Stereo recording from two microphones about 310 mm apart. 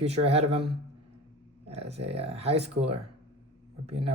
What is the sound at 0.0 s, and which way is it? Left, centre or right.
Speech, centre.